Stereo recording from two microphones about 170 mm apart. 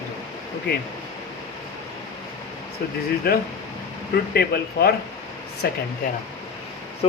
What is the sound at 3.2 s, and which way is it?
Speech, 65° left (ahead or behind).